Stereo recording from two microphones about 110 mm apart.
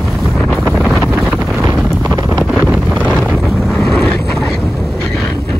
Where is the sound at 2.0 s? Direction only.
25° right (ahead or behind).